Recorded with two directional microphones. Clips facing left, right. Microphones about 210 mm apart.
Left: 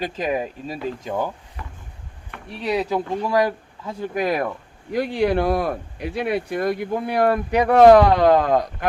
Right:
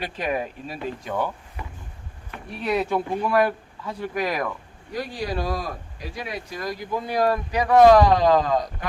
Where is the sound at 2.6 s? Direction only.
15° left (ahead or behind).